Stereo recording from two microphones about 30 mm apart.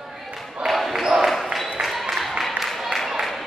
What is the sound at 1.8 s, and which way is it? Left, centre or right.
Music, centre.